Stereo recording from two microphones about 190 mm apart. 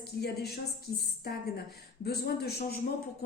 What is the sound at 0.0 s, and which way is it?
A woman's voice, 55° left (ahead or behind).